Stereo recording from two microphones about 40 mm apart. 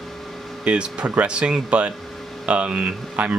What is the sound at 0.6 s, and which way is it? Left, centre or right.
Speech, right.